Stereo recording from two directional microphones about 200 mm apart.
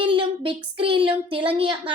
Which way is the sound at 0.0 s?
25° right (ahead or behind).